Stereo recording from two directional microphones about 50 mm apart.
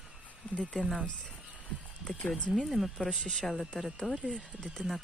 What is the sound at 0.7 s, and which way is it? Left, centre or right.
Speech, centre.